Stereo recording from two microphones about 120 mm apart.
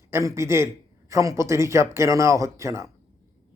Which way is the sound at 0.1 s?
25° right (ahead or behind).